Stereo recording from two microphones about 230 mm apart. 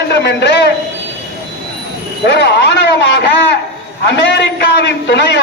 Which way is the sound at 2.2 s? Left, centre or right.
Left.